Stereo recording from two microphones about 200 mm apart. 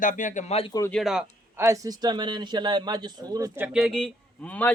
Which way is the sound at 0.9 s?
Centre (ahead or behind).